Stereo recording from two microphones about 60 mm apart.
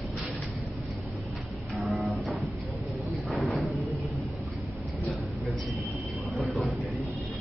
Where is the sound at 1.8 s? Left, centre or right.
Centre.